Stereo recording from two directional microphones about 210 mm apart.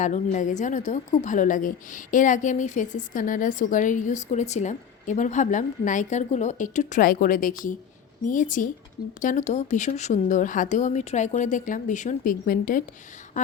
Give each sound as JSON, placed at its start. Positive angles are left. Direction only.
{"t": 0.0, "sound": "a woman's voice", "side_deg": 35}